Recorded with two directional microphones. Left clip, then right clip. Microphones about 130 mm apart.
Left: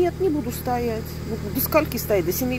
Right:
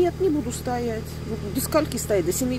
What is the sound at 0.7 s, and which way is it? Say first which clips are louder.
Speech: left 3 dB; 10° right (ahead or behind).